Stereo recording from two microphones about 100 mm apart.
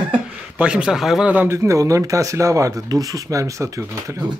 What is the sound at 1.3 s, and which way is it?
Speech, 20° right (ahead or behind).